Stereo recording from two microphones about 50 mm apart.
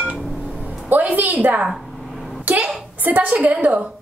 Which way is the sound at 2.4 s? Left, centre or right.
Right.